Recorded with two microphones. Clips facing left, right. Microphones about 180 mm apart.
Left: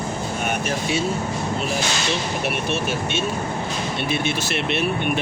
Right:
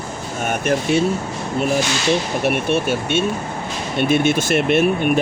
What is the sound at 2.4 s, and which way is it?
Speech, 50° right (ahead or behind).